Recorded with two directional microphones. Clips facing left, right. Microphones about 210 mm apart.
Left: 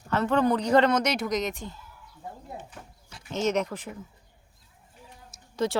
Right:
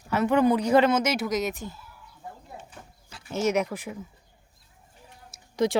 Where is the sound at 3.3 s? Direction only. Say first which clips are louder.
Right 1 dB; 10° right (ahead or behind).